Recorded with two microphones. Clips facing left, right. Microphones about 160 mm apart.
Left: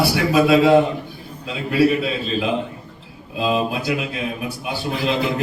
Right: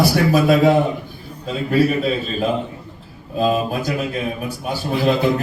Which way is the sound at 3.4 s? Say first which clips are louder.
Right 2 dB; 45° right (ahead or behind).